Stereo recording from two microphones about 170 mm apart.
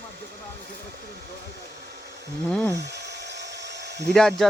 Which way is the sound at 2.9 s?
85° right.